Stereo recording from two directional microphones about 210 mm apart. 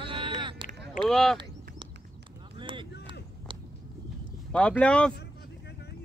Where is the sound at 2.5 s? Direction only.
25° right (ahead or behind).